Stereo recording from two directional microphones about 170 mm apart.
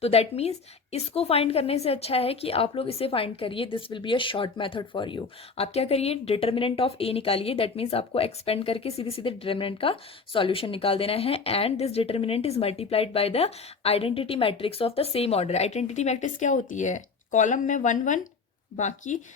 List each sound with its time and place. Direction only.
0.0 s a woman's voice: 35° left (ahead or behind)